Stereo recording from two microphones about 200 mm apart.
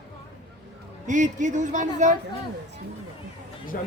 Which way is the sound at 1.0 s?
40° right (ahead or behind).